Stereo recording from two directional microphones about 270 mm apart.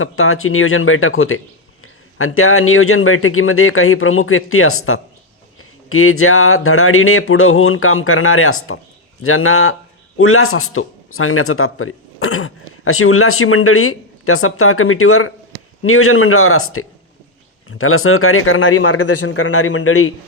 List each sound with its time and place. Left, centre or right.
0.0 s a man's voice: left